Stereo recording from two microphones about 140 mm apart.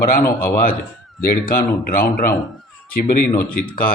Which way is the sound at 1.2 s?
90° left.